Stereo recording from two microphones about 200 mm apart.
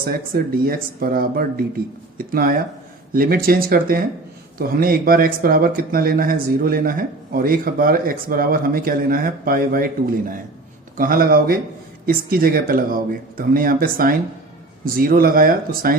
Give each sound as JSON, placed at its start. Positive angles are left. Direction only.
{"t": 0.0, "sound": "speech", "side_deg": -45}